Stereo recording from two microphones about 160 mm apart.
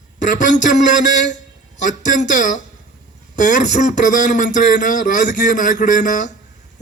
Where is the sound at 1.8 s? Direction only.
50° left (ahead or behind).